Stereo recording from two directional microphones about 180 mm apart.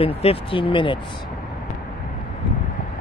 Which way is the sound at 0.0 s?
30° left (ahead or behind).